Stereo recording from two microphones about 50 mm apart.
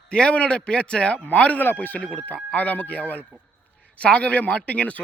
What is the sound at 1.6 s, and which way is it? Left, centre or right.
A man's voice, left.